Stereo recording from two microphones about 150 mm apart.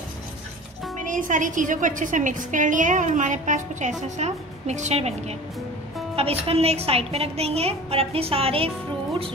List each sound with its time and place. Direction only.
1.0 s a woman's voice: 60° right (ahead or behind)
6.1 s a woman's voice: 40° right (ahead or behind)